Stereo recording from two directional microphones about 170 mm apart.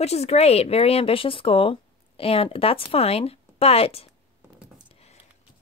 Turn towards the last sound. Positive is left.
turn(degrees=35)  # may be behind; listen again after turning